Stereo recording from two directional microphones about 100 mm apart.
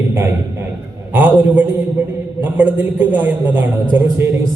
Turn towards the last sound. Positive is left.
turn(degrees=-15)  # may be behind; listen again after turning